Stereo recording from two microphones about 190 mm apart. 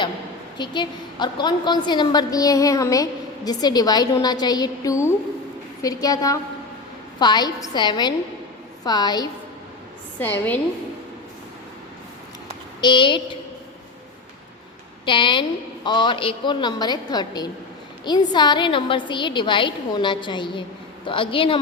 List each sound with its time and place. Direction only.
0.6 s a woman's voice: 25° left (ahead or behind)
10.2 s a woman's voice: 10° left (ahead or behind)
12.8 s a woman's voice: 25° left (ahead or behind)
15.0 s a woman's voice: 25° left (ahead or behind)